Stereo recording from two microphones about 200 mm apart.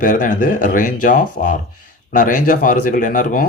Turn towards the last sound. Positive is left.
turn(degrees=40)  # may be behind; listen again after turning